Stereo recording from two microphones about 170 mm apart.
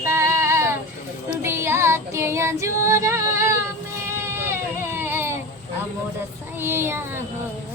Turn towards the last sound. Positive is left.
turn(degrees=-15)  # may be behind; listen again after turning